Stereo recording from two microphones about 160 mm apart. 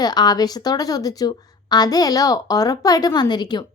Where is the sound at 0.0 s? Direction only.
25° left (ahead or behind).